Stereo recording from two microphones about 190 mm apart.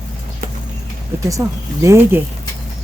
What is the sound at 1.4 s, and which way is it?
Speech, 15° right (ahead or behind).